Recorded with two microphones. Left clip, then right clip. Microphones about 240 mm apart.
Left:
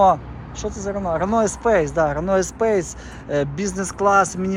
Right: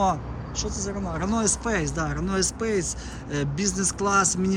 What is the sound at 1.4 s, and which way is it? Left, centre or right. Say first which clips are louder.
Speech: left 8 dB; centre.